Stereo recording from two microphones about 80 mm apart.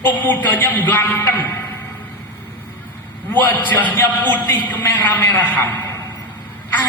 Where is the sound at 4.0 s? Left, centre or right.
Left.